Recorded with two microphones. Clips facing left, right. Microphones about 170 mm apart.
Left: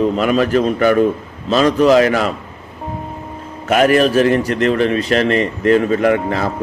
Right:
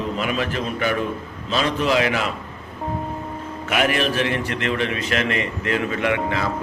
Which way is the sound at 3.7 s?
40° left (ahead or behind).